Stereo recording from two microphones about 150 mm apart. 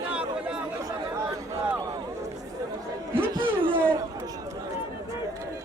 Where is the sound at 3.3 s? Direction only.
35° right (ahead or behind).